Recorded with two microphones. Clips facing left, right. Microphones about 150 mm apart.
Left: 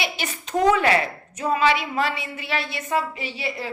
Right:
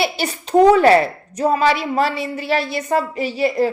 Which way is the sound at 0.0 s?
35° right (ahead or behind).